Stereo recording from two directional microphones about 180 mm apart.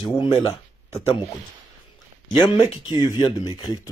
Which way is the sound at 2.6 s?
30° left (ahead or behind).